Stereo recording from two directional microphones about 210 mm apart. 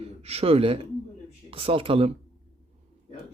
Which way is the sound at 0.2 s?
30° right (ahead or behind).